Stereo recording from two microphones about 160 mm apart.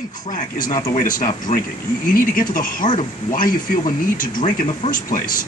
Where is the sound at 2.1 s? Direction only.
60° left (ahead or behind).